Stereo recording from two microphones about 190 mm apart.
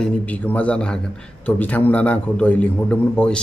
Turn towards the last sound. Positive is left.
turn(degrees=5)  # may be behind; listen again after turning